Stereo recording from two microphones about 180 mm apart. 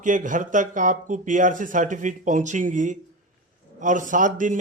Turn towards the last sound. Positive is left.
turn(degrees=-45)  # may be behind; listen again after turning